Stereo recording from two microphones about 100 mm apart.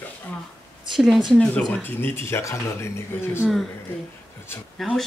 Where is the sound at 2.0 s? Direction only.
25° left (ahead or behind).